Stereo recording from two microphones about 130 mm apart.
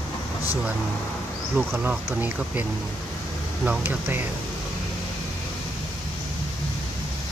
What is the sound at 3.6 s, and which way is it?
Speech, 15° right (ahead or behind).